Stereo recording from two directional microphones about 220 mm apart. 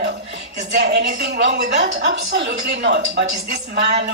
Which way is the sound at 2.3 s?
55° right (ahead or behind).